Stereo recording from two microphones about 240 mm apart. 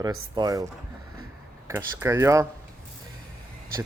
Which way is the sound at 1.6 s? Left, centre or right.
Centre.